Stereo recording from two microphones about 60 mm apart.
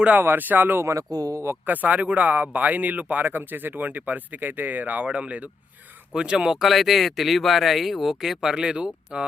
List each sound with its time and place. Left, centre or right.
0.2 s speech: right
0.9 s speech: right
1.6 s speech: right